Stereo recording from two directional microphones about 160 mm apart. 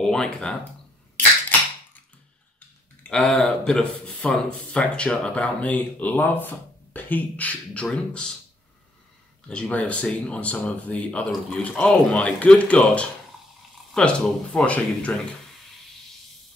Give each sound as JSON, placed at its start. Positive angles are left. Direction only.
{"t": 0.0, "sound": "speech", "side_deg": 5}
{"t": 3.0, "sound": "speech", "side_deg": 5}
{"t": 9.5, "sound": "speech", "side_deg": 5}